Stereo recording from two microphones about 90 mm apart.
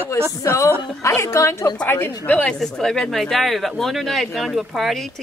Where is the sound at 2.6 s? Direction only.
5° left (ahead or behind).